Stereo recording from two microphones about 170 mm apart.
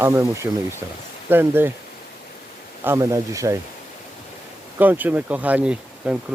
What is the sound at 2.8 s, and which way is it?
Speech, 15° right (ahead or behind).